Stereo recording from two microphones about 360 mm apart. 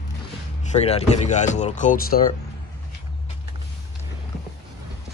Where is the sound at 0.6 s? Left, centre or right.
Centre.